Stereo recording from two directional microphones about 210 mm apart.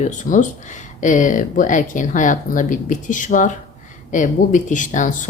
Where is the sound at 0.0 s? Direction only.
35° left (ahead or behind).